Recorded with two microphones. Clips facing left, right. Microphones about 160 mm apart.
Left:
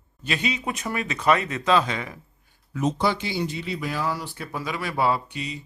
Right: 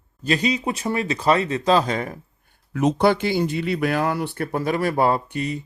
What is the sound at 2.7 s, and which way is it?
Speech, 60° right (ahead or behind).